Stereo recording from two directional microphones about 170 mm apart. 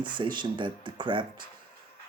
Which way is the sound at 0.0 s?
25° right (ahead or behind).